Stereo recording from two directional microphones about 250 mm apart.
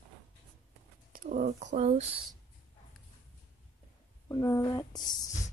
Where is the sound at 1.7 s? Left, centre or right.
Right.